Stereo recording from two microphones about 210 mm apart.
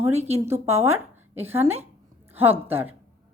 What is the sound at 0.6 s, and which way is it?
Speech, 10° right (ahead or behind).